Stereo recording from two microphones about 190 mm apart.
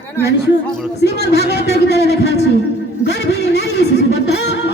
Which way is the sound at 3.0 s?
60° left (ahead or behind).